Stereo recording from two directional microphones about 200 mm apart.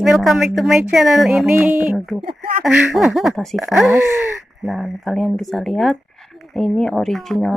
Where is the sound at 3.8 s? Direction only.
10° right (ahead or behind).